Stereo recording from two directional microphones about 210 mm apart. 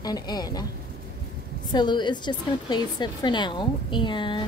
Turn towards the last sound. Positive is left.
turn(degrees=20)  # may be behind; listen again after turning